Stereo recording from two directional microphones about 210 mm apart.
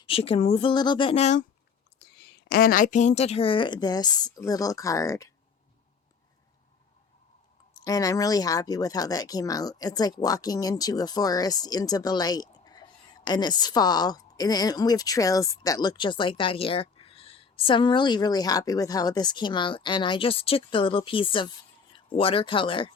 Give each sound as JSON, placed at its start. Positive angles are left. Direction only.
{"t": 0.0, "sound": "speech", "side_deg": 25}
{"t": 2.5, "sound": "speech", "side_deg": 45}
{"t": 7.7, "sound": "speech", "side_deg": 20}